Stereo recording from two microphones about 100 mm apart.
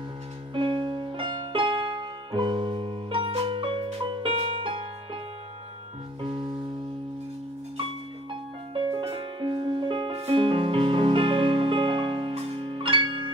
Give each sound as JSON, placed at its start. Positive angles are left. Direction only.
{"t": 0.6, "sound": "music", "side_deg": -55}
{"t": 6.2, "sound": "music", "side_deg": -55}
{"t": 8.3, "sound": "music", "side_deg": -65}